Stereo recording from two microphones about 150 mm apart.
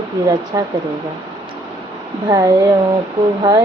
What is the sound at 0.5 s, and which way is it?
Speech, 25° right (ahead or behind).